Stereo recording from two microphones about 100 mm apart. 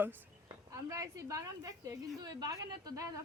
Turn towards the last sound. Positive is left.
turn(degrees=-35)  # may be behind; listen again after turning